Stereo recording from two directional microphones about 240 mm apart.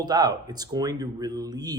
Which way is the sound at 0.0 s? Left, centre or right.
Centre.